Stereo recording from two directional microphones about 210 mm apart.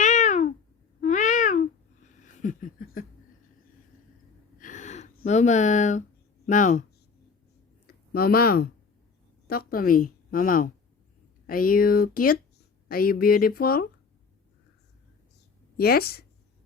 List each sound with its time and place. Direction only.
0.0 s cat: 35° left (ahead or behind)
1.0 s babbling: 35° left (ahead or behind)
4.6 s gasp: 35° left (ahead or behind)
6.4 s speech: 35° left (ahead or behind)
7.9 s a woman's voice: 45° left (ahead or behind)
15.8 s a woman's voice: 45° left (ahead or behind)